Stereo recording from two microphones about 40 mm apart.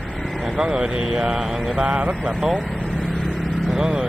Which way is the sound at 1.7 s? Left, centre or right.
Right.